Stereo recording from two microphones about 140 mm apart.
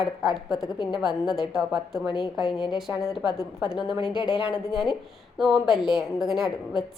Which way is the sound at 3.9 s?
35° left (ahead or behind).